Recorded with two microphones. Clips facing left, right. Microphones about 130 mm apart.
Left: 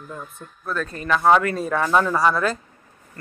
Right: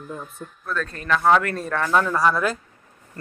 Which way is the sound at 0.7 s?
10° left (ahead or behind).